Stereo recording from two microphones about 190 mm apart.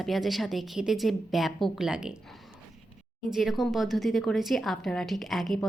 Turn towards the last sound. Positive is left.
turn(degrees=0)  # may be behind; listen again after turning